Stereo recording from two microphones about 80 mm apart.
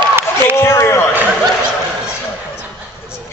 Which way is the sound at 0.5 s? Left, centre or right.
Left.